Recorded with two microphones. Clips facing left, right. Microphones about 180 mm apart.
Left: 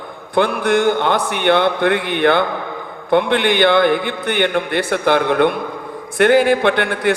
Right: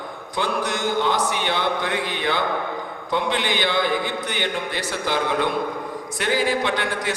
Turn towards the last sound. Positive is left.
turn(degrees=60)  # may be behind; listen again after turning